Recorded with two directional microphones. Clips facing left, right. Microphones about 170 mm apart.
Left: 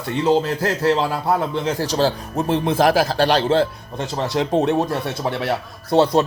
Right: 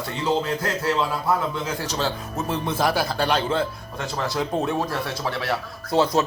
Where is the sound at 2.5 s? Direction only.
90° left.